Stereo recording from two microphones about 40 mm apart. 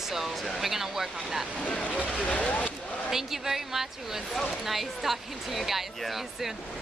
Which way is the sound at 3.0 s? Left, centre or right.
Centre.